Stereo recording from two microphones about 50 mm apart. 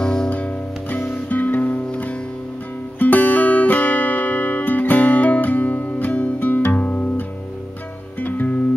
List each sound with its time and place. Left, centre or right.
0.0 s music: centre
0.3 s music: left